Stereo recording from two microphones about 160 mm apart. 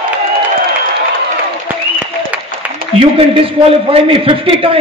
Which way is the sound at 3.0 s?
30° right (ahead or behind).